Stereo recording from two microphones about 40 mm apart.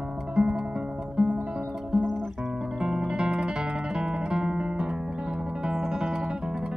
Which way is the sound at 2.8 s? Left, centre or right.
Centre.